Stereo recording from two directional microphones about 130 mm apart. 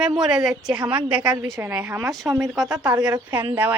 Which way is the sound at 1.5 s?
20° right (ahead or behind).